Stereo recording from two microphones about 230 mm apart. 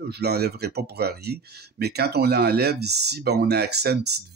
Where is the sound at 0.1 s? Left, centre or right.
Right.